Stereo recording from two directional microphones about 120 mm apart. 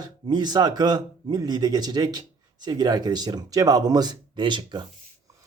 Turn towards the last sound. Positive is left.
turn(degrees=-40)  # may be behind; listen again after turning